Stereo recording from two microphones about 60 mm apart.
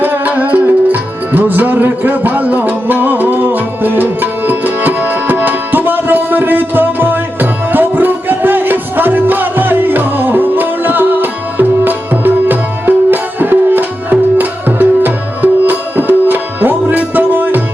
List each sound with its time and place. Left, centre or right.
0.0 s music: right